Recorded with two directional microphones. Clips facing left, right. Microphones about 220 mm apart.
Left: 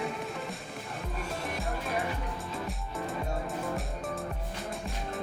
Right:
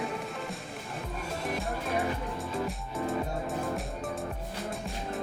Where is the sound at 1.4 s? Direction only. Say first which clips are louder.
Right 4 dB; centre (ahead or behind).